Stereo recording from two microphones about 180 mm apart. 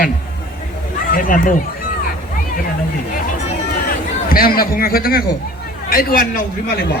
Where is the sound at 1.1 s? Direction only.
50° left (ahead or behind).